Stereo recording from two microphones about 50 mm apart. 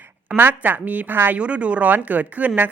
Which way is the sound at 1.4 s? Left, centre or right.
Right.